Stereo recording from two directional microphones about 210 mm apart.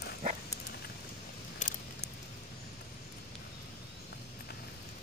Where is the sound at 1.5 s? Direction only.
35° left (ahead or behind).